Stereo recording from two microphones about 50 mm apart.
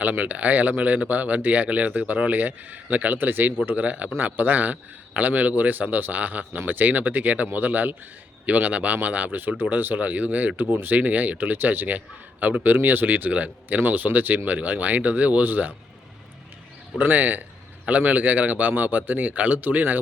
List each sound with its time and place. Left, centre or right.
0.0 s a man's voice: right
10.9 s a man's voice: right
17.0 s a man's voice: right